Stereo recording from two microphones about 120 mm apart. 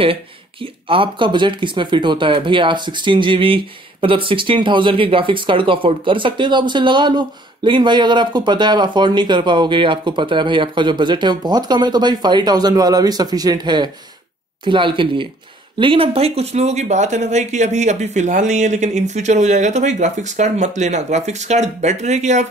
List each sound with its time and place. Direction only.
0.0 s a woman's voice: 50° right (ahead or behind); by 22.5 s 75° right (ahead or behind)